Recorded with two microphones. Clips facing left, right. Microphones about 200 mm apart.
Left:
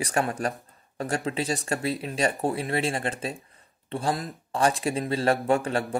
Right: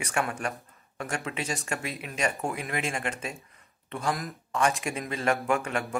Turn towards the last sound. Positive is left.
turn(degrees=35)  # may be behind; listen again after turning